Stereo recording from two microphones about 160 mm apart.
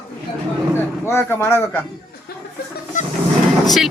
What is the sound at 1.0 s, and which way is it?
Speech, 15° left (ahead or behind).